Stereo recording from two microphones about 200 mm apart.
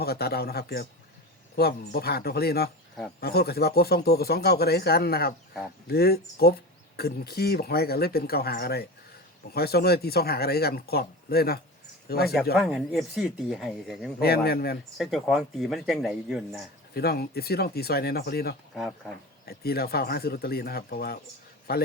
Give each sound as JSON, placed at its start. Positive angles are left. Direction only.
{"t": 0.0, "sound": "speech", "side_deg": 50}
{"t": 12.5, "sound": "a man's voice", "side_deg": 0}
{"t": 14.2, "sound": "speech", "side_deg": 50}
{"t": 14.9, "sound": "a man's voice", "side_deg": 0}
{"t": 16.9, "sound": "speech", "side_deg": 50}
{"t": 18.7, "sound": "speech", "side_deg": 0}
{"t": 19.5, "sound": "speech", "side_deg": 50}